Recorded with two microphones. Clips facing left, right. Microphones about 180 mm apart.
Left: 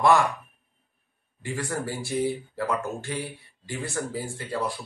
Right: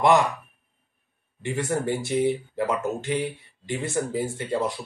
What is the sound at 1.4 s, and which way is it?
Speech, 25° right (ahead or behind).